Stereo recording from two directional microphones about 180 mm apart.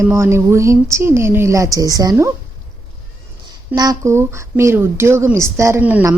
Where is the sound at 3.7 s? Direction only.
20° right (ahead or behind).